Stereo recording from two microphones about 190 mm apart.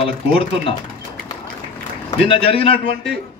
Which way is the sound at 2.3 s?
30° left (ahead or behind).